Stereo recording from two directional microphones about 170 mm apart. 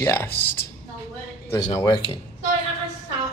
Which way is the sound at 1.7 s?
20° left (ahead or behind).